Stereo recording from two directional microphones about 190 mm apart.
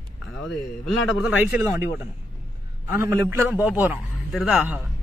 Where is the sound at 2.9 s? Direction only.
15° right (ahead or behind).